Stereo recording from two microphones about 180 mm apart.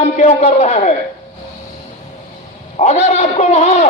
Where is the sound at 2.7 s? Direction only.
40° left (ahead or behind).